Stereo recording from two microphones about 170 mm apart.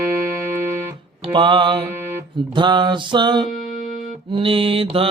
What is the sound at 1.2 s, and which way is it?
Music, 30° right (ahead or behind).